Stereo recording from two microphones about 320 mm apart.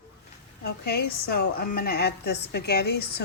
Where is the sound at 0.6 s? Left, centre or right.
Left.